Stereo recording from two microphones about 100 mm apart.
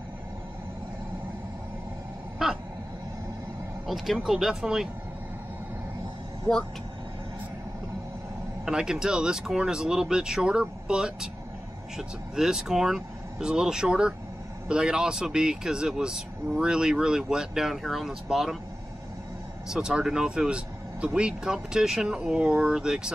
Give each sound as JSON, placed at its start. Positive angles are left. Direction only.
{"t": 2.4, "sound": "a sound", "side_deg": -5}
{"t": 3.8, "sound": "speech", "side_deg": 0}
{"t": 8.6, "sound": "speech", "side_deg": -5}
{"t": 19.7, "sound": "speech", "side_deg": -5}